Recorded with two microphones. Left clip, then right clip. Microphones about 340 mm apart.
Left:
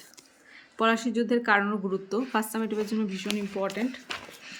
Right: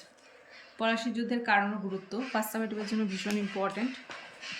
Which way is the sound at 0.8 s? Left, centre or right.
Centre.